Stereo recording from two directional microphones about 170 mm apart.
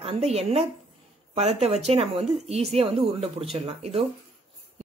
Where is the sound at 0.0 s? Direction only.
40° right (ahead or behind).